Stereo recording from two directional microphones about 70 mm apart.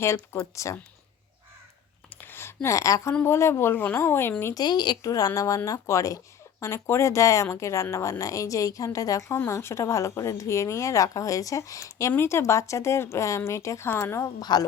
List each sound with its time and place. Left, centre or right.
0.3 s a woman's voice: left
2.2 s a sound: left
2.6 s a woman's voice: left
4.5 s a woman's voice: left
5.1 s a woman's voice: left
9.5 s a woman's voice: left
12.1 s a woman's voice: left
14.3 s a woman's voice: left